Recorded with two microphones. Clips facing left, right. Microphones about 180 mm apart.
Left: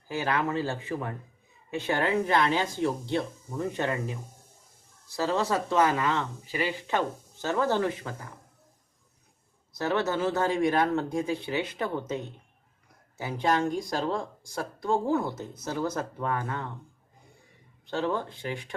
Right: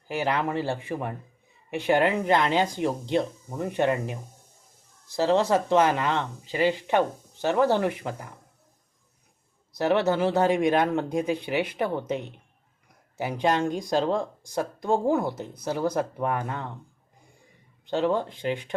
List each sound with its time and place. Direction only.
0.1 s speech: 20° right (ahead or behind)
5.1 s speech: 20° right (ahead or behind)
9.7 s speech: 15° right (ahead or behind)
17.8 s speech: 20° right (ahead or behind)